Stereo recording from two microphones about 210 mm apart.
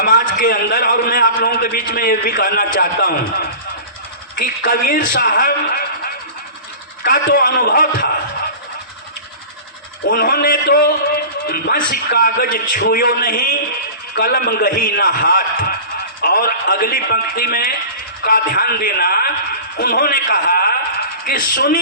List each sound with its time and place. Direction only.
0.0 s a man's voice: 40° left (ahead or behind)
7.3 s a man's voice: 45° left (ahead or behind)
10.1 s a man's voice: 45° left (ahead or behind)